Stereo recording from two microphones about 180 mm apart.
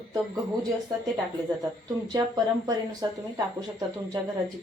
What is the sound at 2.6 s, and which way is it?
A woman's voice, 20° right (ahead or behind).